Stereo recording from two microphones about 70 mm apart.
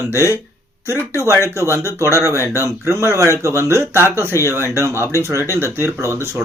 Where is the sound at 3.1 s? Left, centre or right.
Left.